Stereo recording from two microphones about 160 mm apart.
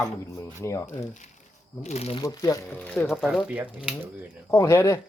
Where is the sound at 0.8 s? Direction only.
50° left (ahead or behind).